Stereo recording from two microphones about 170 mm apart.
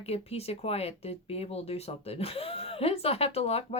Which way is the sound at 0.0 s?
35° left (ahead or behind).